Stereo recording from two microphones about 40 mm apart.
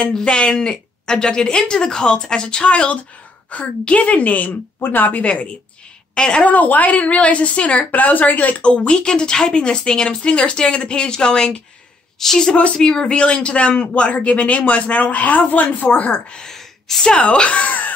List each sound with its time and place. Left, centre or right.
0.2 s a woman's voice: left
6.1 s a woman's voice: left
6.4 s a woman's voice: left; by 12.5 s centre
12.5 s a woman's voice: left
16.4 s a sound: centre
17.2 s speech: left